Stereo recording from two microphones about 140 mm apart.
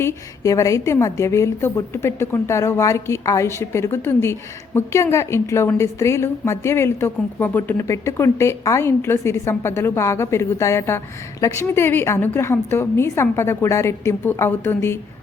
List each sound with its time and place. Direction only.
0.0 s a woman's voice: 20° left (ahead or behind)